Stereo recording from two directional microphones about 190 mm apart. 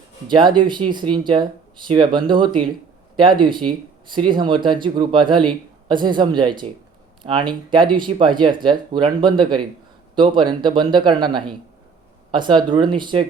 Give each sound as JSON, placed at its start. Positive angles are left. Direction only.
{"t": 0.3, "sound": "speech", "side_deg": -25}